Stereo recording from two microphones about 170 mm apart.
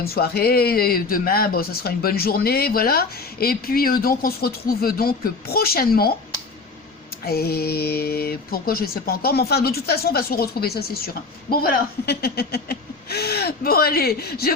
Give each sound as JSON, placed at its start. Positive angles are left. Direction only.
{"t": 0.0, "sound": "speech", "side_deg": 65}
{"t": 7.3, "sound": "speech", "side_deg": 65}